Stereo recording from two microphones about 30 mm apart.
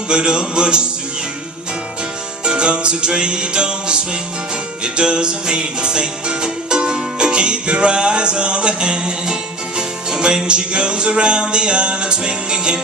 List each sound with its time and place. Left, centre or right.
0.1 s music: right
2.4 s music: right